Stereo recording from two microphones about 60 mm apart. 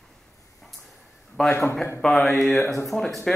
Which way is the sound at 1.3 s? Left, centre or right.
Centre.